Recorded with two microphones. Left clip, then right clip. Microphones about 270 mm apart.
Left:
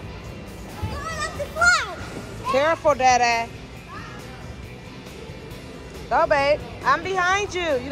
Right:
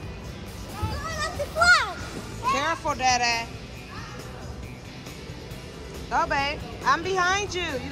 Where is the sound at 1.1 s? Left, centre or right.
Right.